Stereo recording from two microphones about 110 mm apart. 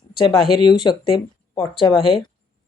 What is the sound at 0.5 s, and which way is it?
A woman's voice, 45° left (ahead or behind).